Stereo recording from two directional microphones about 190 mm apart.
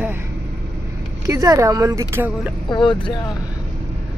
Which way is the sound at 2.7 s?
25° left (ahead or behind).